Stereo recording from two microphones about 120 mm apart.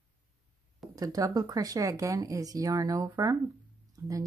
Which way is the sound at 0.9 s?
30° right (ahead or behind).